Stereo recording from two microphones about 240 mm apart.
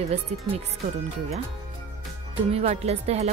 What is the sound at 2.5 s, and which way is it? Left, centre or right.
Speech, right.